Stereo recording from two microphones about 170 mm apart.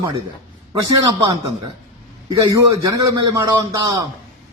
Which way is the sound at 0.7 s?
20° right (ahead or behind).